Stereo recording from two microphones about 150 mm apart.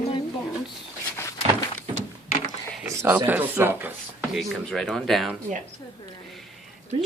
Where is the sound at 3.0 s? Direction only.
10° right (ahead or behind).